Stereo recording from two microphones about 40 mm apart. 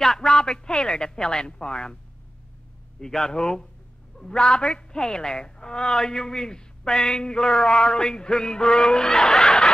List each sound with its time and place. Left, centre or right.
0.0 s a man's voice: centre
3.0 s a man's voice: centre